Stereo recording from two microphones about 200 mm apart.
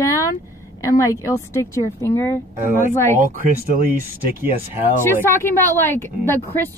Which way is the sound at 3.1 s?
45° right (ahead or behind).